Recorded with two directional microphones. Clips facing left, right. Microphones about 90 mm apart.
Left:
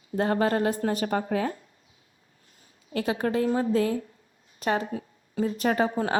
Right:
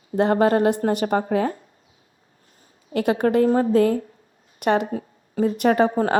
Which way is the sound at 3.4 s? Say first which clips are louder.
Right 6 dB; 40° right (ahead or behind).